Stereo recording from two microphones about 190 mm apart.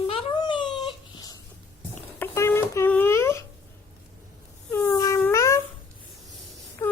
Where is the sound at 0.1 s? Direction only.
25° left (ahead or behind).